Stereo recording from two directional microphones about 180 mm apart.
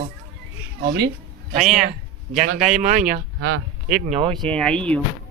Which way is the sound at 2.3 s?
40° right (ahead or behind).